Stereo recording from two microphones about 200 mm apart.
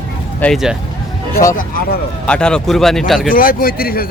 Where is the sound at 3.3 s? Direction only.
45° left (ahead or behind).